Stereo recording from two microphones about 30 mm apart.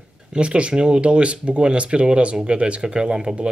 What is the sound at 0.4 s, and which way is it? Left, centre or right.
Speech, right.